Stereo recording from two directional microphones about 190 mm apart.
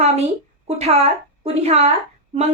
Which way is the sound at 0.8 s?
35° right (ahead or behind).